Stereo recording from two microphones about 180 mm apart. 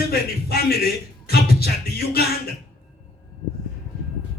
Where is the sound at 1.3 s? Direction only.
60° left (ahead or behind).